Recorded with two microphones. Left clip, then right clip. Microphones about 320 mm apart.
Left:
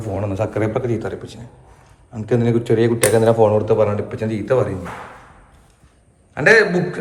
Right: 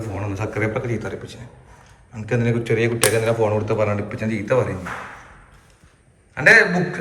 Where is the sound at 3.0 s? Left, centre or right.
Centre.